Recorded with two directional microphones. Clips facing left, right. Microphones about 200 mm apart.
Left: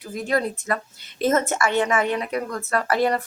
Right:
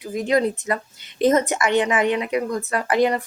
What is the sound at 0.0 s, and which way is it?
Speech, 20° right (ahead or behind).